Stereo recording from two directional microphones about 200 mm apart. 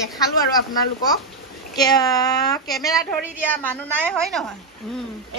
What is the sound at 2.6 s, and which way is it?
A child's voice, centre (ahead or behind).